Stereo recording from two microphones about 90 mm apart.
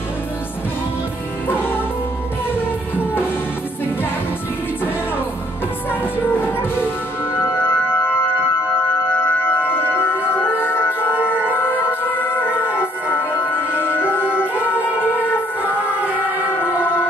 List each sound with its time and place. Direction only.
1.5 s music: 25° left (ahead or behind)
6.1 s music: 20° left (ahead or behind)